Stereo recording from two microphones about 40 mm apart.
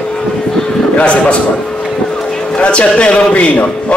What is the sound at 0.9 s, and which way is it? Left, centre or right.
Speech, left.